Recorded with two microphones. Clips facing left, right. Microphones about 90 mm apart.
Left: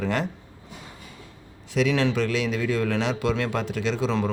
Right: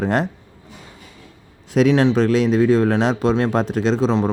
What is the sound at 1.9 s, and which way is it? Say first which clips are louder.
Speech: right 9 dB; 35° right (ahead or behind).